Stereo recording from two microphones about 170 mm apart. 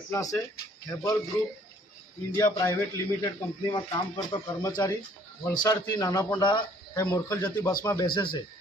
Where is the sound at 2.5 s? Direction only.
15° left (ahead or behind).